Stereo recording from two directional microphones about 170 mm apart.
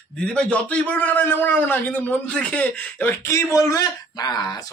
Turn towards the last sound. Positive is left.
turn(degrees=20)  # may be behind; listen again after turning